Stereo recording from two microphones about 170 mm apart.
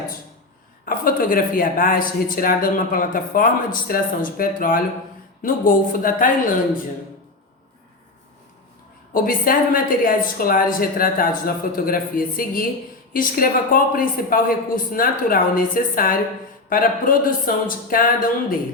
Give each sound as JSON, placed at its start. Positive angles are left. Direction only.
{"t": 0.9, "sound": "a woman's voice", "side_deg": 55}
{"t": 9.1, "sound": "a woman's voice", "side_deg": 55}